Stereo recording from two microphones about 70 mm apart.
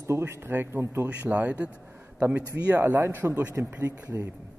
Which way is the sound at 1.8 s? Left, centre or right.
Right.